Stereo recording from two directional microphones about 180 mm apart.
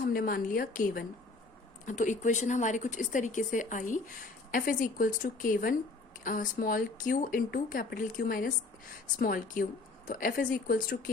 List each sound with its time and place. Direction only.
0.0 s speech: 50° left (ahead or behind)